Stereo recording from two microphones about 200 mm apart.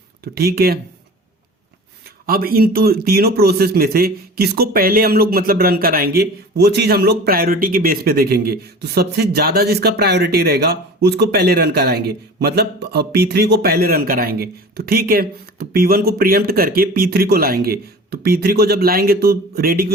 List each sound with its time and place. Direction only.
0.3 s speech: 50° right (ahead or behind)
2.0 s speech: 50° right (ahead or behind)